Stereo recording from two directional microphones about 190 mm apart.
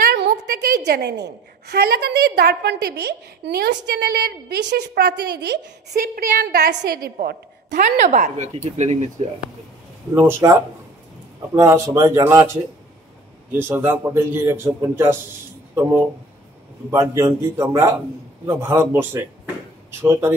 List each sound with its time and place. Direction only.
0.0 s a woman's voice: 55° right (ahead or behind); by 8.9 s 35° right (ahead or behind)
10.1 s a man's voice: 15° right (ahead or behind)